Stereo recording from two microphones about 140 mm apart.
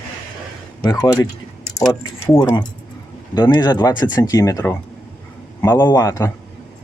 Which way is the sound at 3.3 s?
30° left (ahead or behind).